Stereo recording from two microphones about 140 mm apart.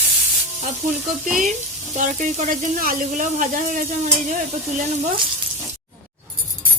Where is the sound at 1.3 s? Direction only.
65° right (ahead or behind).